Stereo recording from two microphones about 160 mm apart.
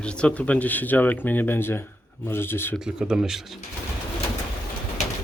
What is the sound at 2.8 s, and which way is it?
Speech, 5° right (ahead or behind).